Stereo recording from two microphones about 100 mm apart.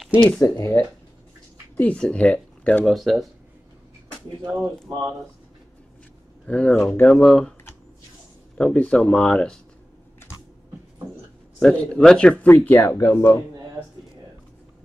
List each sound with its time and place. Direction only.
0.2 s speech: 5° left (ahead or behind)
0.6 s speech: 25° left (ahead or behind)
1.8 s speech: 10° left (ahead or behind)
2.8 s speech: centre (ahead or behind)
4.6 s speech: 5° left (ahead or behind)
6.4 s speech: 15° left (ahead or behind)
8.5 s speech: 10° left (ahead or behind)
11.6 s speech: 5° left (ahead or behind)
12.4 s speech: 20° left (ahead or behind)